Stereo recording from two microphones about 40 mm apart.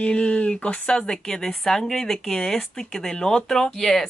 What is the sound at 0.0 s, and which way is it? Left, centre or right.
Speech, left.